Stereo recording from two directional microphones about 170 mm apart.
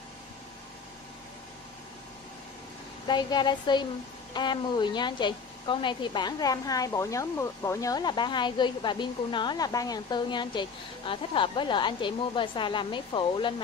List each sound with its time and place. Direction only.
3.1 s a woman's voice: 25° left (ahead or behind)